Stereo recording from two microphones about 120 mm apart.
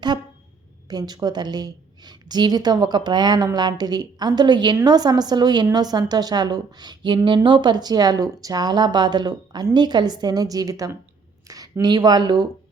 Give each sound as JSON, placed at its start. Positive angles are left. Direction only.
{"t": 0.9, "sound": "a woman's voice", "side_deg": -35}